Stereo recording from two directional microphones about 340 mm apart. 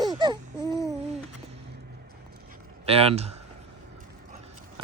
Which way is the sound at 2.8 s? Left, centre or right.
Centre.